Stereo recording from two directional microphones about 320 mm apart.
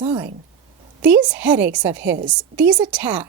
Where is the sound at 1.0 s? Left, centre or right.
Centre.